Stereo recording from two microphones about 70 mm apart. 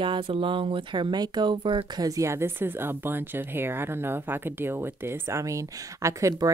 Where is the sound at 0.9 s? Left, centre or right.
Right.